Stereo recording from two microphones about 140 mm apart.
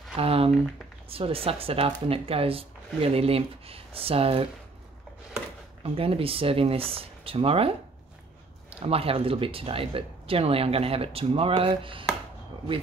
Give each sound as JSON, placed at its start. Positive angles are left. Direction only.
{"t": 0.1, "sound": "speech", "side_deg": -45}
{"t": 5.9, "sound": "speech", "side_deg": -40}
{"t": 8.7, "sound": "speech", "side_deg": -45}